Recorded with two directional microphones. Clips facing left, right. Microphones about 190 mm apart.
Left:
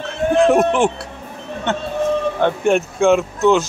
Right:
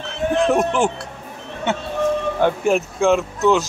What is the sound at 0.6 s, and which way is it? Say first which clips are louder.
Speech: left 3 dB; centre (ahead or behind).